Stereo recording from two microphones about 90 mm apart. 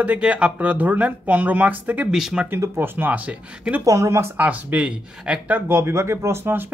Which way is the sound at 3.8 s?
35° right (ahead or behind).